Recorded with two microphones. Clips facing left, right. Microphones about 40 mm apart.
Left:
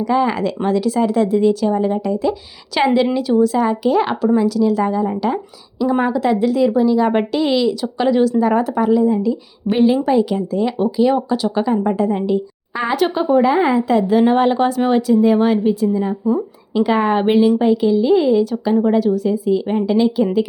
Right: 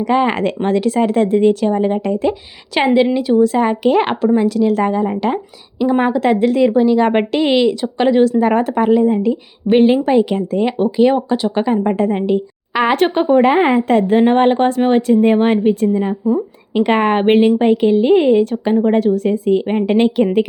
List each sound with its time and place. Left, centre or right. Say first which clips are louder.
0.0 s speech: right 2 dB; right
2.7 s a woman's voice: right 2 dB; right
12.7 s speech: right 5 dB; right
13.1 s speech: right 1 dB; right
13.4 s a woman's voice: right 2 dB; right
15.0 s a woman's voice: right 1 dB; right